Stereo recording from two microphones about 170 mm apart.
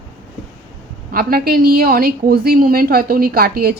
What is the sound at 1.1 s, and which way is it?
Speech, 60° right (ahead or behind).